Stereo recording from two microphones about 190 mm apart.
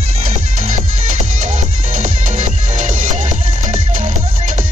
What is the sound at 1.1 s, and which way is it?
Music, 40° right (ahead or behind).